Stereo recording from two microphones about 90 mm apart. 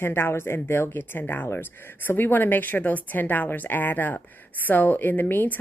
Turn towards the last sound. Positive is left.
turn(degrees=20)  # may be behind; listen again after turning